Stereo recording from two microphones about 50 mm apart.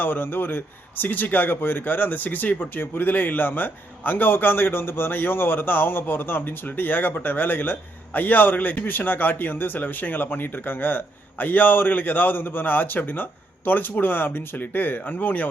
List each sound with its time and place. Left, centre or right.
0.0 s a man's voice: left